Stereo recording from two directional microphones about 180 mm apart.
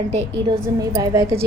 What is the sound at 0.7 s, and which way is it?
Speech, 20° right (ahead or behind).